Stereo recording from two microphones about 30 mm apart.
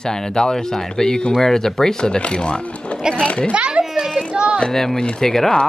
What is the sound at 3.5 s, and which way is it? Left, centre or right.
Children playing, right.